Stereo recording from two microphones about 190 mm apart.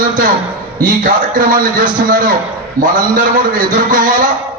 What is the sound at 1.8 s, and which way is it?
Speech, 45° right (ahead or behind).